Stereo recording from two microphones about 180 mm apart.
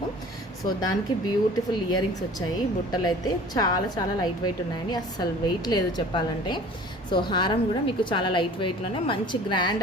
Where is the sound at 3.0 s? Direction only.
20° left (ahead or behind).